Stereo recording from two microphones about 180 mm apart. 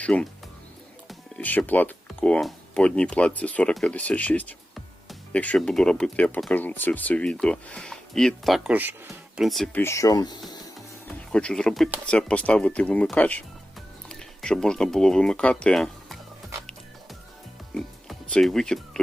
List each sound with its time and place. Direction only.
0.0 s speech: 5° left (ahead or behind)
9.8 s speech: 15° left (ahead or behind)
10.8 s music: 5° left (ahead or behind)
12.0 s speech: 5° left (ahead or behind)
17.7 s music: centre (ahead or behind)